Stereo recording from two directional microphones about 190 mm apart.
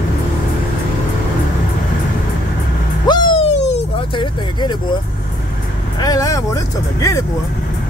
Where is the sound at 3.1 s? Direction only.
25° left (ahead or behind).